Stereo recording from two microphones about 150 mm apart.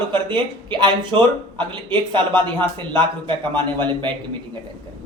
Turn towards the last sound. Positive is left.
turn(degrees=-30)  # may be behind; listen again after turning